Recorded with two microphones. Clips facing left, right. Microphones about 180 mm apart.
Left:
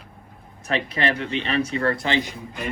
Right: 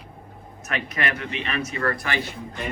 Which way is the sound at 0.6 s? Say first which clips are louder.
Left 4 dB; 30° left (ahead or behind).